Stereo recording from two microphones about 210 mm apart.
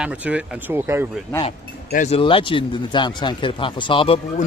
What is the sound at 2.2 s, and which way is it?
Speech, 25° left (ahead or behind).